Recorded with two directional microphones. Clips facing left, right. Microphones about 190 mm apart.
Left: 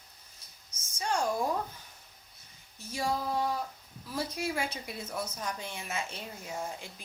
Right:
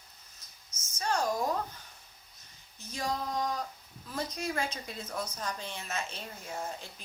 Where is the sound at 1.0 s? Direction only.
10° left (ahead or behind).